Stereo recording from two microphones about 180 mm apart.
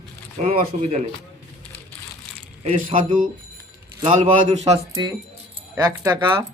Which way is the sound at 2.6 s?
40° right (ahead or behind).